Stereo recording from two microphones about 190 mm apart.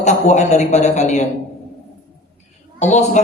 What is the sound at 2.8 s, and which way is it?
Speech, 40° left (ahead or behind).